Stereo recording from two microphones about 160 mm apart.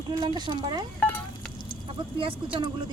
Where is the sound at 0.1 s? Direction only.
25° right (ahead or behind).